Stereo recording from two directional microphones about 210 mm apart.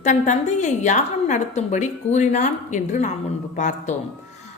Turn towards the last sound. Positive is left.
turn(degrees=35)  # may be behind; listen again after turning